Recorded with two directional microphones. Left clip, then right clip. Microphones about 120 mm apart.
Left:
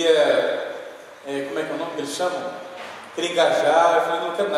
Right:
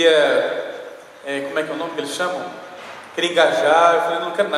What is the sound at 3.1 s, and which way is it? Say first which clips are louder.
Speech: right 3 dB; 15° right (ahead or behind).